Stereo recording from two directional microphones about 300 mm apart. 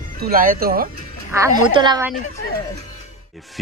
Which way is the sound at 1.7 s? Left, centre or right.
Centre.